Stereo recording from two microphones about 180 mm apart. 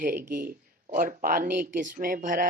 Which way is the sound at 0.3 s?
50° right (ahead or behind).